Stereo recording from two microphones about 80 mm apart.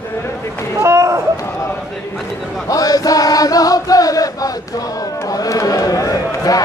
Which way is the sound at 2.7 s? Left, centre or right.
Left.